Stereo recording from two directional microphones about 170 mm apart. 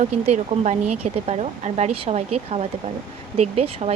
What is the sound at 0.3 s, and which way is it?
Speech, 40° right (ahead or behind).